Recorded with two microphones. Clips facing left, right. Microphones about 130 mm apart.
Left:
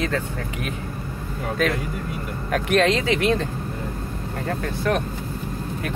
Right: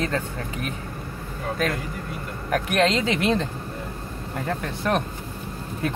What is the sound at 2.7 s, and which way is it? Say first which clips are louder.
Speech: left 3 dB; 20° right (ahead or behind).